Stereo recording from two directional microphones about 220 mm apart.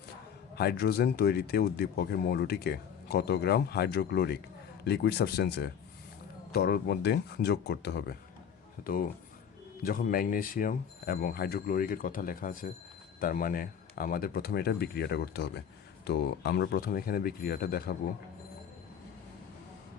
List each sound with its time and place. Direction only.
0.5 s speech: 45° left (ahead or behind)